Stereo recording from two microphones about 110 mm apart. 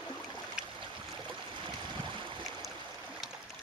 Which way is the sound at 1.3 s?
45° right (ahead or behind).